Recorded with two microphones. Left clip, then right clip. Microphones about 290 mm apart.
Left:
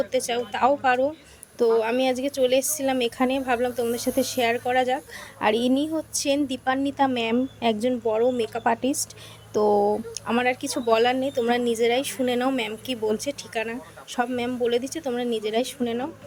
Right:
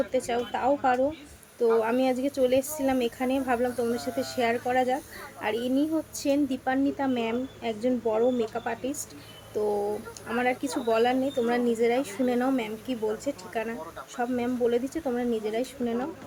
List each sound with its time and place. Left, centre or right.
0.1 s a woman's voice: left